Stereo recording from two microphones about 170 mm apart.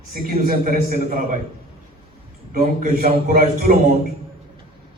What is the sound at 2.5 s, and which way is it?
A man's voice, 55° right (ahead or behind).